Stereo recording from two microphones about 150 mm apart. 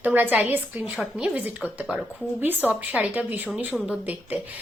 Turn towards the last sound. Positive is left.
turn(degrees=-10)  # may be behind; listen again after turning